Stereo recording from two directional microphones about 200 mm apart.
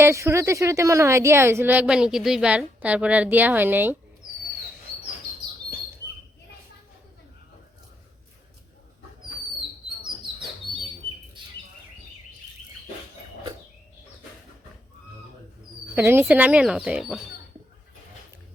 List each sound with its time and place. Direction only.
0.0 s a woman's voice: 15° right (ahead or behind)
11.4 s bird: 25° right (ahead or behind)
16.0 s a woman's voice: 10° right (ahead or behind)